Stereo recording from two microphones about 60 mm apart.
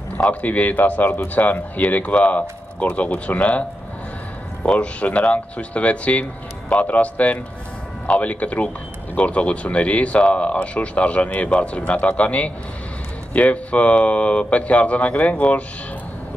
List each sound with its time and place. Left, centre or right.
0.2 s speech: left
4.6 s speech: left